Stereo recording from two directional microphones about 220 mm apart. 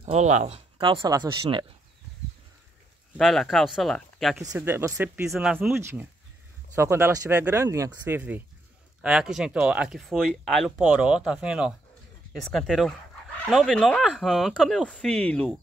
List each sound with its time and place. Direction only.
0.0 s speech: 30° right (ahead or behind)
3.2 s speech: centre (ahead or behind)
4.5 s speech: 10° right (ahead or behind)